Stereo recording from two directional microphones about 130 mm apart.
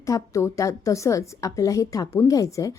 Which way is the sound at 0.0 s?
25° left (ahead or behind).